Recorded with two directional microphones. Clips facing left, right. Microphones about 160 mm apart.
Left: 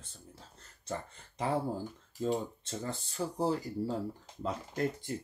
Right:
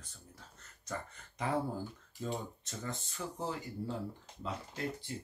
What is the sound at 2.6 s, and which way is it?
Speech, 30° left (ahead or behind).